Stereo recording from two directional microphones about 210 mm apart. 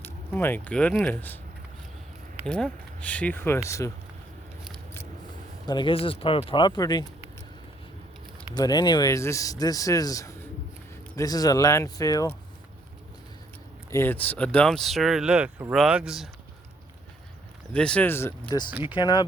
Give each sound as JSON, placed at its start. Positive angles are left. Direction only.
{"t": 0.0, "sound": "speech", "side_deg": 10}
{"t": 2.5, "sound": "speech", "side_deg": 5}
{"t": 5.6, "sound": "speech", "side_deg": 20}
{"t": 8.5, "sound": "speech", "side_deg": 20}
{"t": 13.9, "sound": "speech", "side_deg": 10}
{"t": 17.7, "sound": "speech", "side_deg": 5}
{"t": 18.7, "sound": "speech", "side_deg": -5}
{"t": 18.9, "sound": "speech", "side_deg": 20}